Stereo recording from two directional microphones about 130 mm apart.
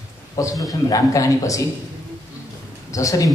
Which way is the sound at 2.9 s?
25° left (ahead or behind).